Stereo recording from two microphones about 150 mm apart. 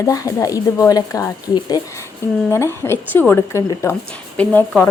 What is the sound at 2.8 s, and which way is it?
Speech, 15° left (ahead or behind).